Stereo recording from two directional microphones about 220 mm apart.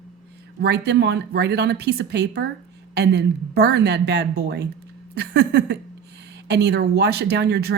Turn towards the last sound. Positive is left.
turn(degrees=-50)  # may be behind; listen again after turning